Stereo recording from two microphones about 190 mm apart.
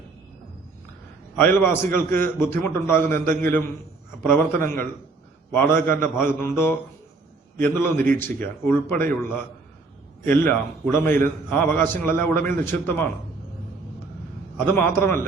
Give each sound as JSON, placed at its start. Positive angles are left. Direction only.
{"t": 1.4, "sound": "a man's voice", "side_deg": 10}
{"t": 10.2, "sound": "a man's voice", "side_deg": 10}
{"t": 14.8, "sound": "a man's voice", "side_deg": 10}